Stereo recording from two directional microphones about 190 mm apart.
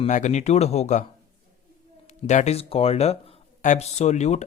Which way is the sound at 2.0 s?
35° left (ahead or behind).